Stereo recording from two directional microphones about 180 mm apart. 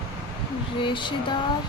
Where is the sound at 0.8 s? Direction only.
25° left (ahead or behind).